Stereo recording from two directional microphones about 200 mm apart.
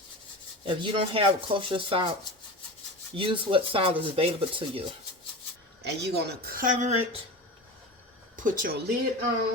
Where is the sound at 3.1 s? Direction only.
25° right (ahead or behind).